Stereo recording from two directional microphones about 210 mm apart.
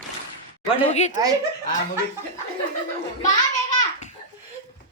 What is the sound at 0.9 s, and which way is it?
Speech, 35° left (ahead or behind).